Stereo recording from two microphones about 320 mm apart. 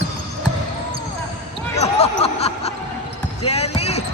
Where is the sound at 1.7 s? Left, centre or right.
Centre.